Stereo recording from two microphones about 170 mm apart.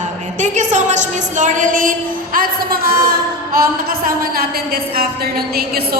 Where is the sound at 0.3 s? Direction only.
45° right (ahead or behind).